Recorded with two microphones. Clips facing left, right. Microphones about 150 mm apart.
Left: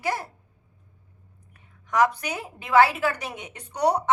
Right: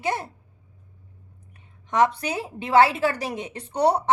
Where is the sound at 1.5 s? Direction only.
25° right (ahead or behind).